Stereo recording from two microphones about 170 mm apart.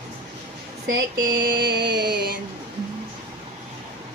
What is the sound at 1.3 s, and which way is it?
Music, 90° right.